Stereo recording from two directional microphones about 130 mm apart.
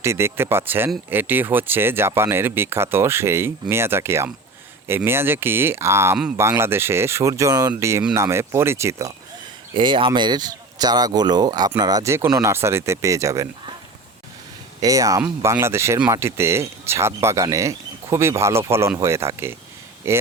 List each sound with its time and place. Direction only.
0.0 s speech: 20° right (ahead or behind)
9.7 s speech: 40° right (ahead or behind); by 13.5 s 25° right (ahead or behind)
14.8 s speech: 25° right (ahead or behind)